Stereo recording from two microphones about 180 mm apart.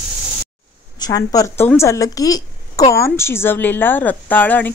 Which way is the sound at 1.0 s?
20° left (ahead or behind).